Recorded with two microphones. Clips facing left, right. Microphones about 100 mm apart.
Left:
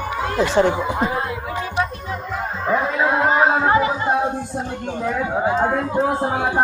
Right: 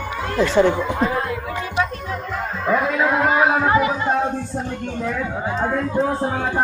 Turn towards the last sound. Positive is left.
turn(degrees=15)  # may be behind; listen again after turning